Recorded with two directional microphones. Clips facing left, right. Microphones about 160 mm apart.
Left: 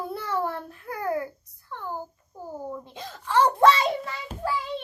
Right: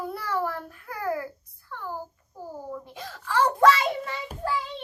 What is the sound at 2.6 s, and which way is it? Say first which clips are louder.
A child's voice: left 1 dB; 20° left (ahead or behind).